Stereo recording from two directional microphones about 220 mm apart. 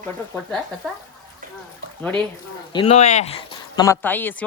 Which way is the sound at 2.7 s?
25° left (ahead or behind).